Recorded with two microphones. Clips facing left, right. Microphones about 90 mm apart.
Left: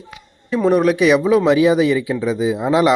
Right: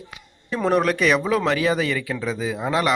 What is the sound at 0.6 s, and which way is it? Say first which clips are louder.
Speech: left 5 dB; 5° left (ahead or behind).